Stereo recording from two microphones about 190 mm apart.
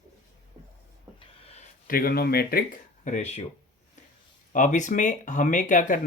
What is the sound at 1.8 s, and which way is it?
Speech, 50° left (ahead or behind).